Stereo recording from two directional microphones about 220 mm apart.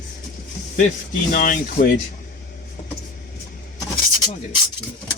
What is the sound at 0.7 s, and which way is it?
Speech, 35° left (ahead or behind).